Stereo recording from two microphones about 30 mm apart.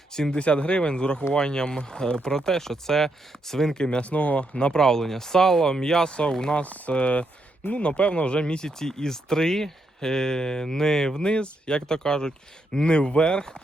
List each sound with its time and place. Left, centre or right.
0.3 s speech: left; by 3.8 s centre
3.8 s speech: left
4.0 s speech: left
4.5 s speech: left
4.8 s speech: centre
6.1 s speech: left
6.6 s speech: left
8.8 s speech: centre
11.2 s speech: left